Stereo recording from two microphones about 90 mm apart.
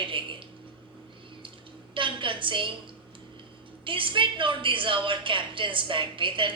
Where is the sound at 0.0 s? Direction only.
70° right (ahead or behind).